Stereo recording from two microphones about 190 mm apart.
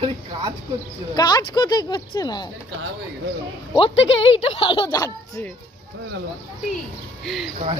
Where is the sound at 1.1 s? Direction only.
20° left (ahead or behind).